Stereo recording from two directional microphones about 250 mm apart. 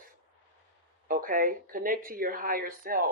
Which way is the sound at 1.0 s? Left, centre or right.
Right.